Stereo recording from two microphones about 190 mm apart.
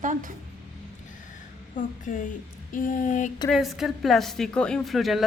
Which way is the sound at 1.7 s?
45° left (ahead or behind).